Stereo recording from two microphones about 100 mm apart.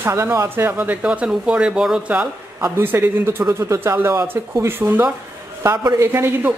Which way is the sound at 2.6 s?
20° right (ahead or behind).